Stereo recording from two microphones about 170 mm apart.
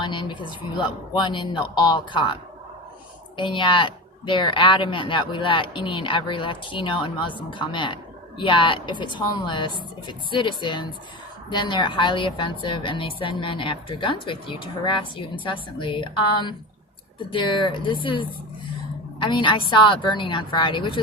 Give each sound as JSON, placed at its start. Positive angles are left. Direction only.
{"t": 0.0, "sound": "a woman's voice", "side_deg": 30}